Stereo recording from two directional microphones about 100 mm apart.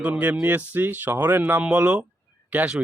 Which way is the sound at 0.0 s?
15° right (ahead or behind).